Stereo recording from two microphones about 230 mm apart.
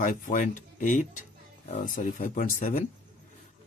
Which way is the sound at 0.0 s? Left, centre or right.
Left.